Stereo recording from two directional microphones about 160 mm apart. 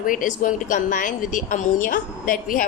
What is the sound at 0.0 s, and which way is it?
A woman's voice, 55° left (ahead or behind).